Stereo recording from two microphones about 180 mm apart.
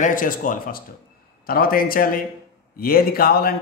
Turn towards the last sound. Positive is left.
turn(degrees=55)  # may be behind; listen again after turning